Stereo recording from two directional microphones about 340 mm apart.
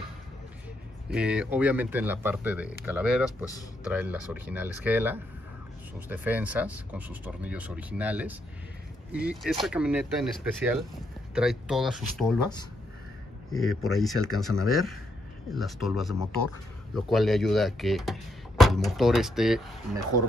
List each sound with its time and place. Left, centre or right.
1.1 s speech: centre
13.5 s speech: left
13.8 s speech: centre